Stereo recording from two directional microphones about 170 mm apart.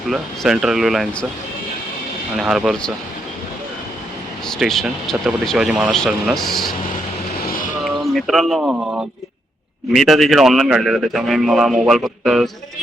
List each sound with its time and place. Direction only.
0.1 s speech: 5° right (ahead or behind)
2.4 s speech: centre (ahead or behind)
4.4 s speech: centre (ahead or behind)
7.4 s music: 55° left (ahead or behind)
8.1 s speech: centre (ahead or behind)